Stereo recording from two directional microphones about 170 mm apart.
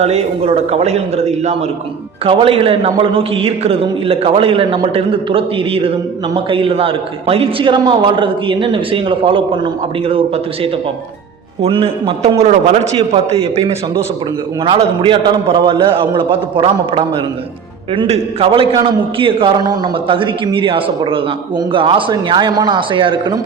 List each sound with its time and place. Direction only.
0.0 s a man's voice: 40° right (ahead or behind)